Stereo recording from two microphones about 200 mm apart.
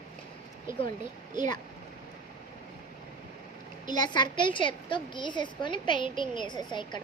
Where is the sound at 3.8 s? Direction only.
20° left (ahead or behind).